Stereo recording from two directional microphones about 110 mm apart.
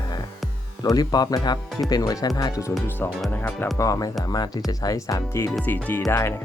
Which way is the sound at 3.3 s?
15° left (ahead or behind).